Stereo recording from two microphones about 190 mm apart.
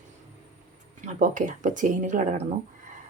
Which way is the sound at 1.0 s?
40° right (ahead or behind).